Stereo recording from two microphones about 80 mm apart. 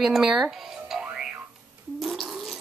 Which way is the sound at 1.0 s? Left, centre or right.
Centre.